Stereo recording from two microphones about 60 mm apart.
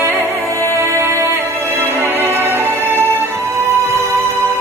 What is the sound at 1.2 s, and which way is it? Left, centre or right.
Music, right.